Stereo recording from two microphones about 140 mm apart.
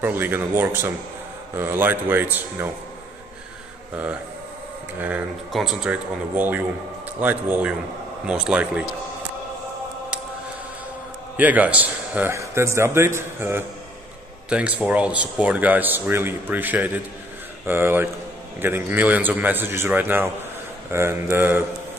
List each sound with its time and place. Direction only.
0.0 s a man's voice: 15° right (ahead or behind)
3.9 s a man's voice: 10° right (ahead or behind)
5.5 s a man's voice: centre (ahead or behind)
11.3 s a man's voice: 10° right (ahead or behind)